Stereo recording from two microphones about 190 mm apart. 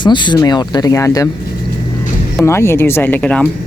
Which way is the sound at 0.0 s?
25° left (ahead or behind).